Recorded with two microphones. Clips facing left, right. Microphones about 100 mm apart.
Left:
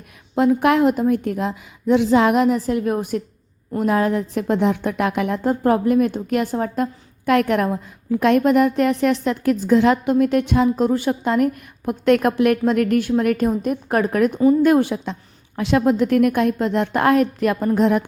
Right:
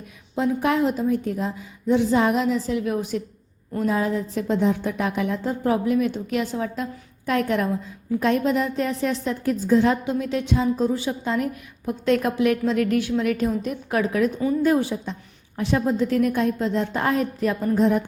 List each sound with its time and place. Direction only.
0.3 s a woman's voice: 65° left (ahead or behind); by 3.2 s 50° left (ahead or behind)
3.8 s a woman's voice: 65° left (ahead or behind)
7.3 s a woman's voice: 65° left (ahead or behind)
14.6 s a woman's voice: 65° left (ahead or behind)
15.5 s a woman's voice: 85° left